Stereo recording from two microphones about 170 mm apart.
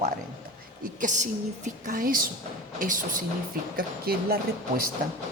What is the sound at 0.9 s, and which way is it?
A woman's voice, 45° right (ahead or behind).